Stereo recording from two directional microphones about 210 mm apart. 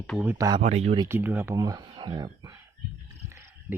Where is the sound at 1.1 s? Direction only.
10° right (ahead or behind).